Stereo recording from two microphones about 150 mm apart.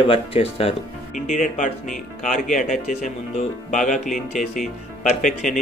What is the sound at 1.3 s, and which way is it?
Speech, 55° left (ahead or behind).